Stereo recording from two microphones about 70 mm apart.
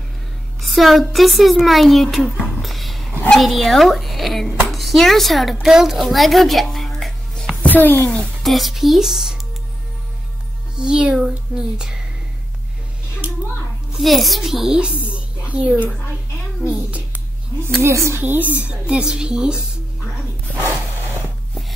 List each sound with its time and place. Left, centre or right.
0.6 s a child's voice: centre
2.6 s a sound: centre
3.3 s speech: centre
7.6 s a child's voice: left
8.1 s speech: centre
10.8 s a woman's voice: centre
13.9 s a child's voice: centre
14.8 s a sound: centre
17.8 s a woman's voice: right
18.2 s a woman's voice: right